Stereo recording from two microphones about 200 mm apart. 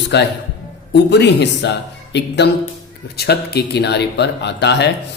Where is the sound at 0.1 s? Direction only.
60° left (ahead or behind).